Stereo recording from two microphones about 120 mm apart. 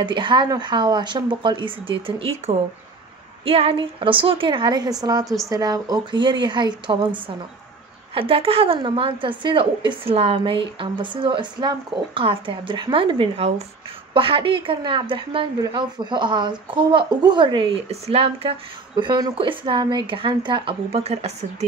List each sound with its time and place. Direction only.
0.0 s speech: 40° right (ahead or behind)
8.1 s speech: 50° right (ahead or behind)
18.9 s speech: 35° right (ahead or behind); by 21.6 s 65° right (ahead or behind)